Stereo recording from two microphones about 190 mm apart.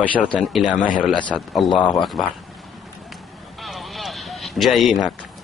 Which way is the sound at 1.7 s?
25° left (ahead or behind).